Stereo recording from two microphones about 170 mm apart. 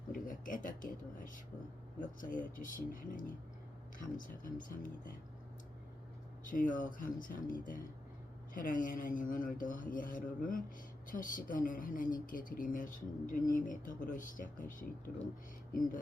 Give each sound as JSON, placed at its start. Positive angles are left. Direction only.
{"t": 0.1, "sound": "a sound", "side_deg": 50}
{"t": 2.3, "sound": "speech", "side_deg": 50}
{"t": 6.4, "sound": "speech", "side_deg": 50}